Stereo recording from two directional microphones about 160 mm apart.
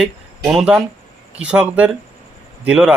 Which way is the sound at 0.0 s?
5° right (ahead or behind).